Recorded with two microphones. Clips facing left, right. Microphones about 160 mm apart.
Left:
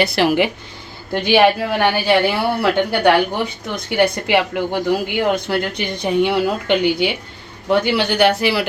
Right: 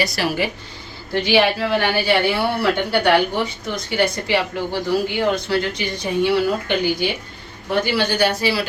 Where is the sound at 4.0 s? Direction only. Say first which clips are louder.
Left 4 dB; 60° left (ahead or behind).